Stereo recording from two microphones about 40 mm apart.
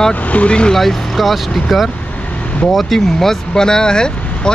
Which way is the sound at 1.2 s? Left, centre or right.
Centre.